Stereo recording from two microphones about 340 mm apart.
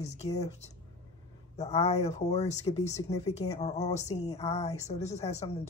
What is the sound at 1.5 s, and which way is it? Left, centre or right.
Speech, centre.